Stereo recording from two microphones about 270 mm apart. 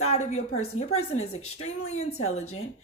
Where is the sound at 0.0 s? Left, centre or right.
Left.